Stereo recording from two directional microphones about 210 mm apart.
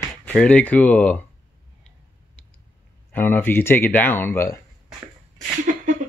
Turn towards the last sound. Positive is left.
turn(degrees=-40)  # may be behind; listen again after turning